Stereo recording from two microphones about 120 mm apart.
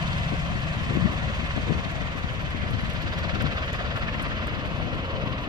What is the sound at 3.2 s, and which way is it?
Vehicle, 35° right (ahead or behind).